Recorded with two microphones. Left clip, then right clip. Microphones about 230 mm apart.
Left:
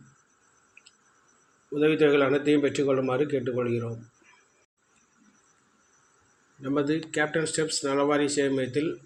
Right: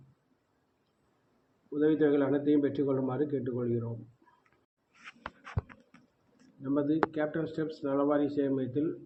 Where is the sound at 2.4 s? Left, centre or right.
Centre.